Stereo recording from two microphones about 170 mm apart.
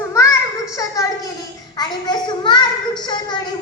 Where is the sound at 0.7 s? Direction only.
20° left (ahead or behind).